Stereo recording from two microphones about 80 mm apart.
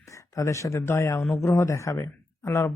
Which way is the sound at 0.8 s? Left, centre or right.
Left.